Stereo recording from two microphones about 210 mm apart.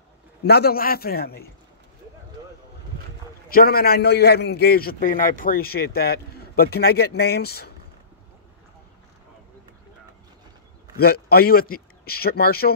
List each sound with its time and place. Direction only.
0.4 s a man's voice: 50° left (ahead or behind)
2.4 s boat: 15° right (ahead or behind)
3.4 s a man's voice: 45° left (ahead or behind)
11.0 s a man's voice: 50° left (ahead or behind)